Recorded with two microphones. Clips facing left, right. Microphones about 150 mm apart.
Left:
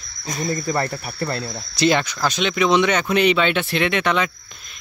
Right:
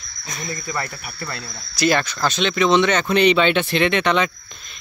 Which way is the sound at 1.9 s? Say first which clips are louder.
Even; 15° left (ahead or behind).